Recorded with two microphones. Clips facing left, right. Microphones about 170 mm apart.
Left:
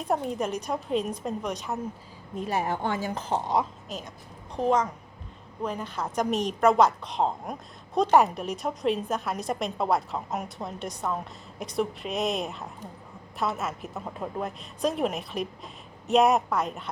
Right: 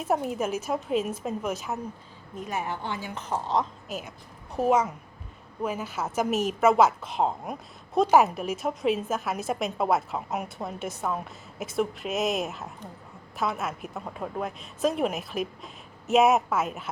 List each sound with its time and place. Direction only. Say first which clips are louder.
0.0 s a woman's voice: right 1 dB; 5° right (ahead or behind)
2.3 s a woman's voice: left 4 dB; 35° left (ahead or behind)
3.4 s speech: right 1 dB; 10° left (ahead or behind)
3.8 s a woman's voice: right 2 dB; 5° right (ahead or behind)